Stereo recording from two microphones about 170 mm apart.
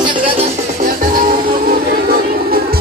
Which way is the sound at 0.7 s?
55° right (ahead or behind).